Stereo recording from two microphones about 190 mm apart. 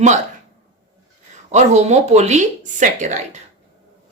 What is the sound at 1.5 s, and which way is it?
A woman's voice, 35° right (ahead or behind).